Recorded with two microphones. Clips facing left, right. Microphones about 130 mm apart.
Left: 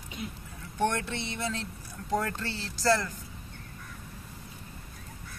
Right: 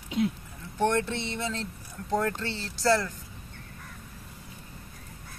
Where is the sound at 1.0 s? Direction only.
5° left (ahead or behind).